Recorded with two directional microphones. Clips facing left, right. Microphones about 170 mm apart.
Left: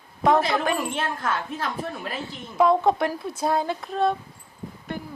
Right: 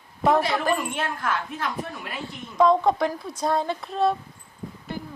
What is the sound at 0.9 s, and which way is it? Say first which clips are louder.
Speech: even; 30° left (ahead or behind).